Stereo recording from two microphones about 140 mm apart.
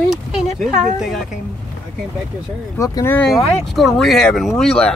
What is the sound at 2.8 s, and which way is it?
Speech, 20° left (ahead or behind).